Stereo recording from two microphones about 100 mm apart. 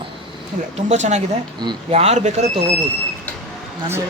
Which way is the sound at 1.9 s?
90° right.